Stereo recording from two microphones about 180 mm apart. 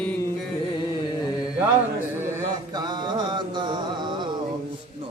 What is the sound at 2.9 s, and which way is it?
Mantra, 25° right (ahead or behind).